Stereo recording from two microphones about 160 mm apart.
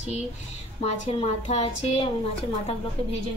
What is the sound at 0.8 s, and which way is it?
A woman's voice, 45° left (ahead or behind).